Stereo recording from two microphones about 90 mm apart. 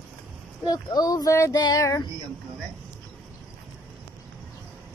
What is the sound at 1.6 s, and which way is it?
Female singing, 40° left (ahead or behind).